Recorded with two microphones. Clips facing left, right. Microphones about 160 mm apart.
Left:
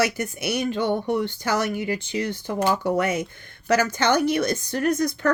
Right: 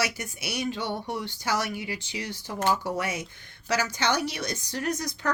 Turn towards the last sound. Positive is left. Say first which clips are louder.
# left 8 dB
turn(degrees=55)  # may be behind; listen again after turning